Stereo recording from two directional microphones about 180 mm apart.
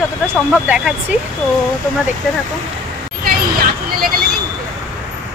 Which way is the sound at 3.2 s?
55° right (ahead or behind).